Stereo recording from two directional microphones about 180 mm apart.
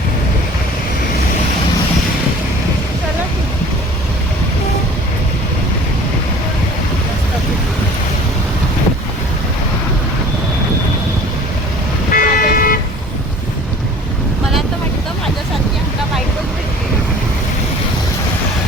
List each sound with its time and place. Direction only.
12.1 s toot: 50° left (ahead or behind)